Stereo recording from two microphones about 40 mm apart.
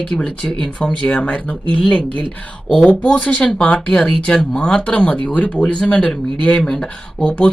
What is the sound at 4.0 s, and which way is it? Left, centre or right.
Speech, centre.